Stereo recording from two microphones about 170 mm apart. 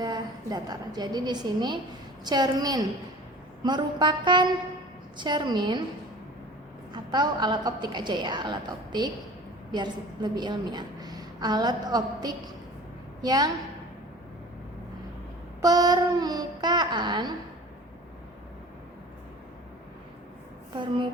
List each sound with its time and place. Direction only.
0.0 s a woman's voice: 25° right (ahead or behind)
6.9 s a woman's voice: 25° right (ahead or behind)
15.6 s a woman's voice: 20° right (ahead or behind)
20.7 s a woman's voice: 30° right (ahead or behind)